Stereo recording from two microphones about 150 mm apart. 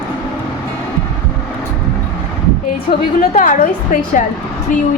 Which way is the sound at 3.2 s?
65° left (ahead or behind).